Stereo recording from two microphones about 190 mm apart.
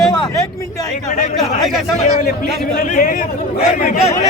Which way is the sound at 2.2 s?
55° left (ahead or behind).